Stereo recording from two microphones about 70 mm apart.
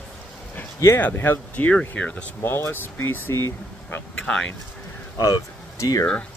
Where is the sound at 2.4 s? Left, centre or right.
Left.